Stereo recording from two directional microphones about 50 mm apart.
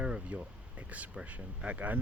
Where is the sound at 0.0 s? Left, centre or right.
Right.